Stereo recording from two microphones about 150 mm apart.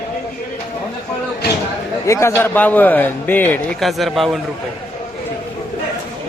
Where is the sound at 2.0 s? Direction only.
20° left (ahead or behind).